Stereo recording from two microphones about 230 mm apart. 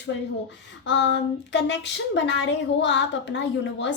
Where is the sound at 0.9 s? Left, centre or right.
Left.